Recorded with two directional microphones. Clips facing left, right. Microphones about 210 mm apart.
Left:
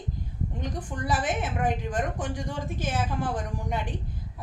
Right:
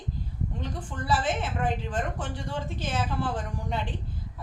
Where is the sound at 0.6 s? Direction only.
15° left (ahead or behind).